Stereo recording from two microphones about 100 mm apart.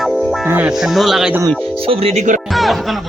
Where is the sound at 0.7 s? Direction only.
Centre (ahead or behind).